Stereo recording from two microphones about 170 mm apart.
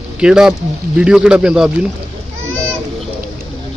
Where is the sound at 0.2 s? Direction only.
5° right (ahead or behind).